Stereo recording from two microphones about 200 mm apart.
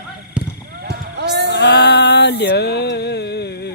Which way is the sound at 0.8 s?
55° right (ahead or behind).